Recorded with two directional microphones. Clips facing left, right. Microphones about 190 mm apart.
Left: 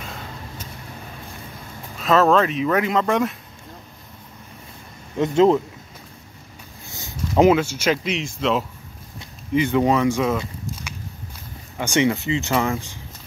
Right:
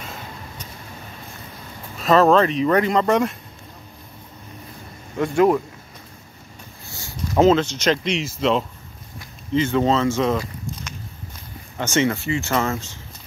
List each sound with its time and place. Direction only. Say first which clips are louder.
2.0 s speech: right 2 dB; centre (ahead or behind)
5.1 s speech: left 1 dB; 20° left (ahead or behind)
6.9 s speech: left 1 dB; 20° left (ahead or behind); by 8.6 s centre (ahead or behind)
9.5 s speech: even; 15° left (ahead or behind)
11.8 s speech: left 1 dB; 15° left (ahead or behind)